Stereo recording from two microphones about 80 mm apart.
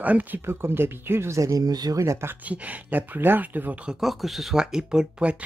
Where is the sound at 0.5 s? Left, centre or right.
Right.